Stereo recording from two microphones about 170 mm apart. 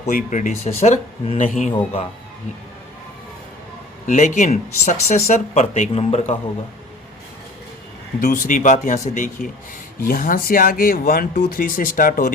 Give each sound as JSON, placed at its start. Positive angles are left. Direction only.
{"t": 0.1, "sound": "speech", "side_deg": 50}
{"t": 4.0, "sound": "speech", "side_deg": 45}
{"t": 8.2, "sound": "speech", "side_deg": 50}